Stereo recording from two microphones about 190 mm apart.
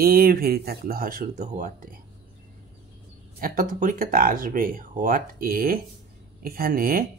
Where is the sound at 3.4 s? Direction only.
50° right (ahead or behind).